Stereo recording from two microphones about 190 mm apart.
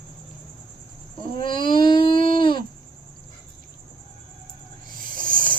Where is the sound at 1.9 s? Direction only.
25° left (ahead or behind).